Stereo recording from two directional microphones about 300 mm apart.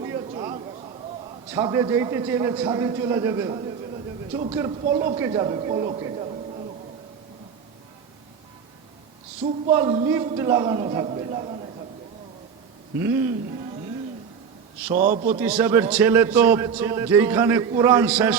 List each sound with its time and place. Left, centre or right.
0.0 s a sound: centre
1.5 s a man's voice: centre
9.4 s a man's voice: centre
13.0 s a man's voice: centre
14.9 s a man's voice: right
15.4 s a man's voice: centre